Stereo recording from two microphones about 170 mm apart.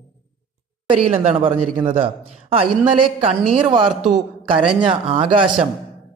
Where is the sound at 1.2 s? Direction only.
40° right (ahead or behind).